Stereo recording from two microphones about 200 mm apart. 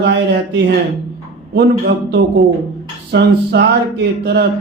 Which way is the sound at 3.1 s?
55° right (ahead or behind).